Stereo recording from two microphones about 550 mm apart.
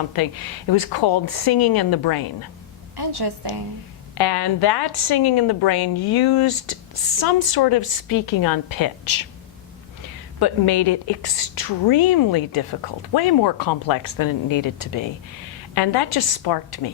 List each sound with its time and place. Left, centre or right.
0.7 s a woman's voice: left
2.9 s a woman's voice: right
4.2 s a woman's voice: left
10.4 s a woman's voice: left